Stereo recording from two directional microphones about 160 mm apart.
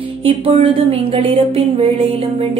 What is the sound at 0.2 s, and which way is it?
Speech, 35° right (ahead or behind).